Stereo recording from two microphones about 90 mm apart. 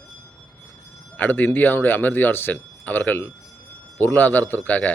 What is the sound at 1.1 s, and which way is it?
A man's voice, 20° left (ahead or behind).